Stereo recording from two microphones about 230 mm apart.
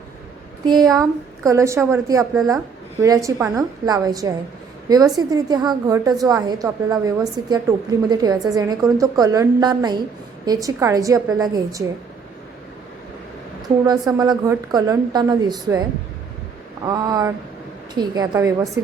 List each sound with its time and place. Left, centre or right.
0.6 s a woman's voice: centre
14.1 s a woman's voice: centre
16.8 s a woman's voice: centre